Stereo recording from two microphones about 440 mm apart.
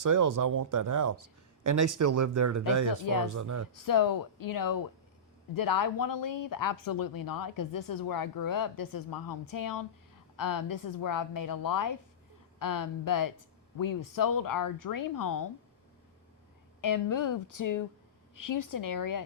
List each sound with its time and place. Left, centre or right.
0.0 s speech: right
3.8 s speech: left
16.8 s speech: left